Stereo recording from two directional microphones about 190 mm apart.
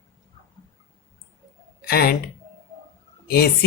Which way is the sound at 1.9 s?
55° left (ahead or behind).